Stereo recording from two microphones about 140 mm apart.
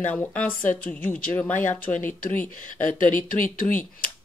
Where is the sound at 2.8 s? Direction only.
70° left (ahead or behind).